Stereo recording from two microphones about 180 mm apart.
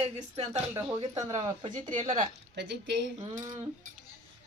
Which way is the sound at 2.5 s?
70° right (ahead or behind).